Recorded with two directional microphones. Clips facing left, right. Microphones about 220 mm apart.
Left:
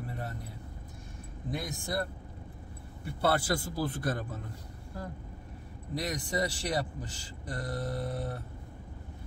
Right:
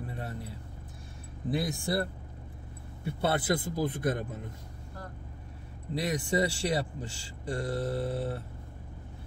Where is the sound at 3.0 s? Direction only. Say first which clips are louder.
Even; 20° right (ahead or behind).